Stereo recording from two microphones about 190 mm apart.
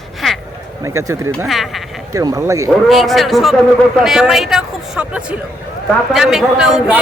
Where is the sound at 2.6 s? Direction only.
Centre (ahead or behind).